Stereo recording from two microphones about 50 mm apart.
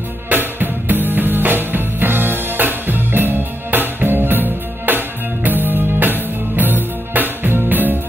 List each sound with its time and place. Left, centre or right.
0.3 s music: right